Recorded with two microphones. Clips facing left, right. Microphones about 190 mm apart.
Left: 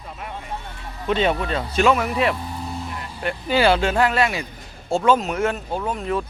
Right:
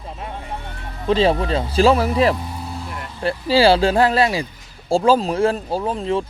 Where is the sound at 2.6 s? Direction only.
Centre (ahead or behind).